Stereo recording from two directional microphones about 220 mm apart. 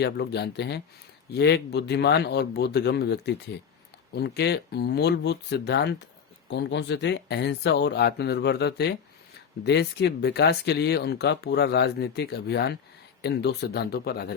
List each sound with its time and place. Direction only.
0.0 s speech: 50° left (ahead or behind)